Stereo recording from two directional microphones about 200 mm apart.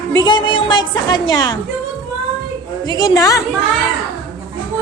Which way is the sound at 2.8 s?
20° left (ahead or behind).